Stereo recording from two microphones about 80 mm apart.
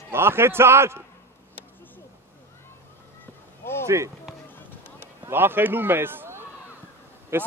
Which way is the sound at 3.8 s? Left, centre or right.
Right.